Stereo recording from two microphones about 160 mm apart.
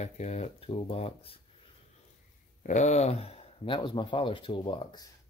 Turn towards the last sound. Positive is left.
turn(degrees=30)  # may be behind; listen again after turning